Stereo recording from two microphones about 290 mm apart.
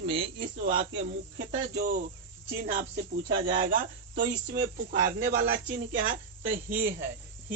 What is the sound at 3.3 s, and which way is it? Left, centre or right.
A woman's voice, right.